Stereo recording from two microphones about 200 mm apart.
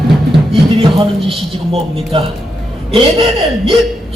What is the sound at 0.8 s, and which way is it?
A man's voice, 25° right (ahead or behind).